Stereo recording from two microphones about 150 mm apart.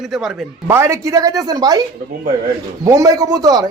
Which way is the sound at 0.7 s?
20° right (ahead or behind).